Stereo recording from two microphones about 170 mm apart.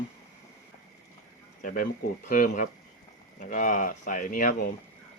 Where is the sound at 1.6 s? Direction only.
50° left (ahead or behind).